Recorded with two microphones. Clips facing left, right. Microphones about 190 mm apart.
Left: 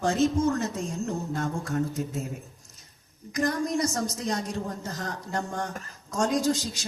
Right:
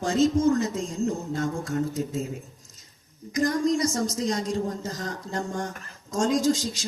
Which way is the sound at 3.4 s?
60° left (ahead or behind).